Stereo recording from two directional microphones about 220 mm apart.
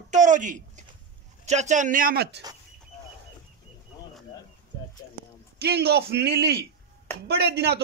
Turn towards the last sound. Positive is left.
turn(degrees=-50)  # may be behind; listen again after turning